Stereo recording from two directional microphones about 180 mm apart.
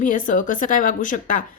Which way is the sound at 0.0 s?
45° left (ahead or behind).